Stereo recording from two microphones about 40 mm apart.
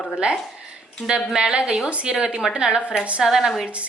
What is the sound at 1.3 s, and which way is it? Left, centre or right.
A woman's voice, centre.